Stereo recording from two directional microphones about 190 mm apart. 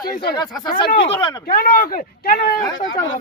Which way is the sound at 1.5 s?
50° left (ahead or behind).